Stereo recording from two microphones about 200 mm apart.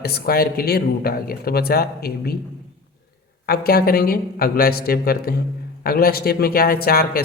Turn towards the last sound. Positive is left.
turn(degrees=50)  # may be behind; listen again after turning